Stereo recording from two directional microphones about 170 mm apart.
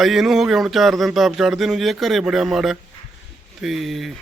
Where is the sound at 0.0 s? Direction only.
Centre (ahead or behind).